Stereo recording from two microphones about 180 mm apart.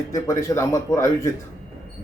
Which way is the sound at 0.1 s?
15° left (ahead or behind).